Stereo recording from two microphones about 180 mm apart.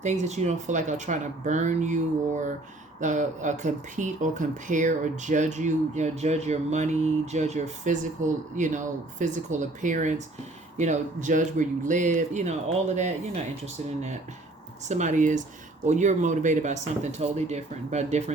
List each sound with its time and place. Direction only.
0.0 s speech: 40° right (ahead or behind)
14.8 s speech: 40° right (ahead or behind)